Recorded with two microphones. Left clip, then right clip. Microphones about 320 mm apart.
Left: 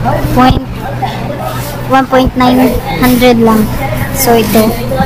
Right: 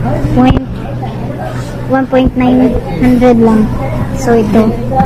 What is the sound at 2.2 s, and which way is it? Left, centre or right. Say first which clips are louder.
A woman's voice: left 2 dB; left.